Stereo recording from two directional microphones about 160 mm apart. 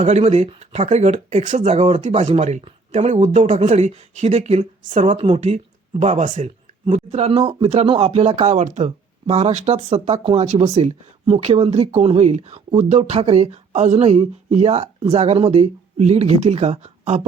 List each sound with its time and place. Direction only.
0.0 s speech: 45° right (ahead or behind)
2.0 s speech: 50° right (ahead or behind)
5.1 s speech: 30° right (ahead or behind)